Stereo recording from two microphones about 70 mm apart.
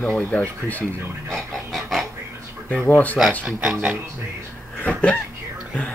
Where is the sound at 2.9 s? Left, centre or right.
Left.